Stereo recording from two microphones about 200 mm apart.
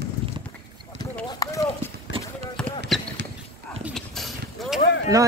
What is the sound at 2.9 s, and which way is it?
Basketball bounce, centre (ahead or behind).